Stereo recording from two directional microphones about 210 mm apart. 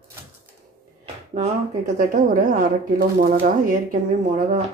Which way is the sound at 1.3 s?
35° right (ahead or behind).